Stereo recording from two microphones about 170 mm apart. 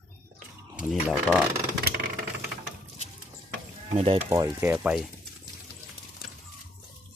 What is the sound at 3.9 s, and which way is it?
Speech, 35° right (ahead or behind).